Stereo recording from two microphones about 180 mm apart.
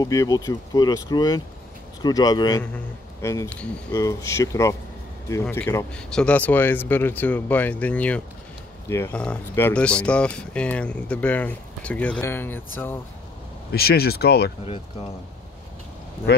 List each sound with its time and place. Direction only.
0.0 s speech: 20° left (ahead or behind)
13.7 s speech: 60° left (ahead or behind)